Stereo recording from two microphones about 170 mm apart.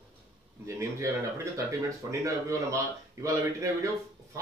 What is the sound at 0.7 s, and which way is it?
Speech, 15° right (ahead or behind).